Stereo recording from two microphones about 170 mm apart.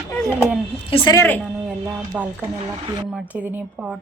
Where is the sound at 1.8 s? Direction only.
10° right (ahead or behind).